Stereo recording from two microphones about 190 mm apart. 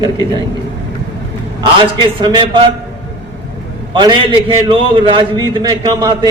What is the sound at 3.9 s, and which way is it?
A man's voice, 25° right (ahead or behind).